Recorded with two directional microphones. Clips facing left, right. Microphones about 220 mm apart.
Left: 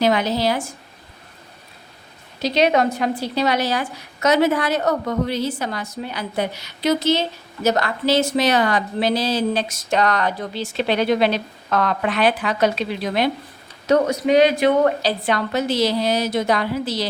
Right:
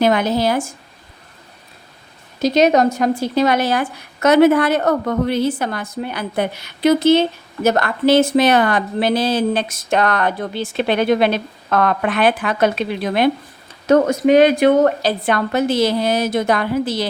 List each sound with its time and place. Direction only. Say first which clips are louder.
0.0 s a woman's voice: right 3 dB; 50° right (ahead or behind)
2.4 s a woman's voice: right 4 dB; 45° right (ahead or behind)